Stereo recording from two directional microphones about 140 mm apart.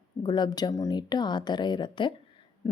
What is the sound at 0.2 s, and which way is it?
Speech, 30° left (ahead or behind).